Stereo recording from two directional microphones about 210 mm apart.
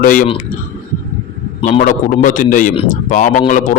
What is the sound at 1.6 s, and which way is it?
Speech, 35° left (ahead or behind).